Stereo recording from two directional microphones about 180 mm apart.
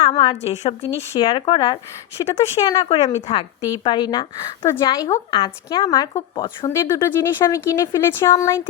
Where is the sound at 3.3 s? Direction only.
30° left (ahead or behind).